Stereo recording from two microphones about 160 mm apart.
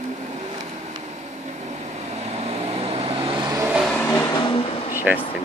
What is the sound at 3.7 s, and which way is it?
Vehicle, centre (ahead or behind).